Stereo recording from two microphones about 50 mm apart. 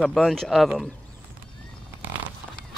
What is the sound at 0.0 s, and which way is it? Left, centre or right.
Speech, centre.